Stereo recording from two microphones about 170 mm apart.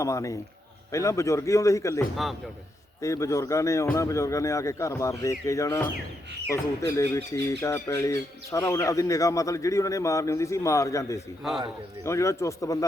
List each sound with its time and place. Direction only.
0.0 s speech: 20° left (ahead or behind)